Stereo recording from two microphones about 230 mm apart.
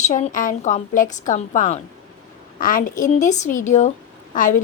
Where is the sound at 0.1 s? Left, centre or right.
Left.